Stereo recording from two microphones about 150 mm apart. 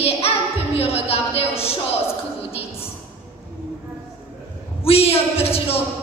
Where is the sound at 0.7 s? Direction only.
40° left (ahead or behind).